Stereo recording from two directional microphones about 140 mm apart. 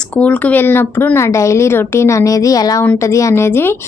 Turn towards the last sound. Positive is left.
turn(degrees=15)  # may be behind; listen again after turning